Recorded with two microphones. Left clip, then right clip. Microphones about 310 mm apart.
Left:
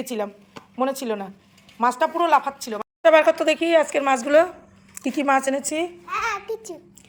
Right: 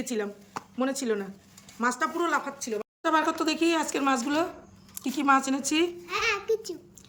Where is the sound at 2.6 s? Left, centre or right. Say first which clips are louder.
Left 3 dB; left.